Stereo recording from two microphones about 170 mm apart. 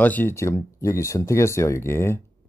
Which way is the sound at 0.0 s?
10° left (ahead or behind).